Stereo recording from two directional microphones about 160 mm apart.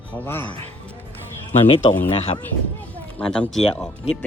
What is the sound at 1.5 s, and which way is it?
Speech, 35° left (ahead or behind).